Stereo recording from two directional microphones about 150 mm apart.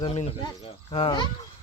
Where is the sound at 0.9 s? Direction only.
35° left (ahead or behind).